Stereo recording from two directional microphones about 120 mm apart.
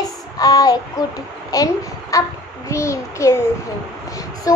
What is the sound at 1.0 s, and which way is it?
A child's voice, 30° left (ahead or behind).